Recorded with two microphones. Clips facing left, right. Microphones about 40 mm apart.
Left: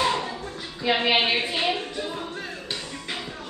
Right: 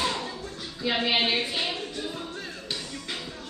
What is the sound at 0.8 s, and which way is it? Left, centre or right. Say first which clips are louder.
Music: left 4 dB; left.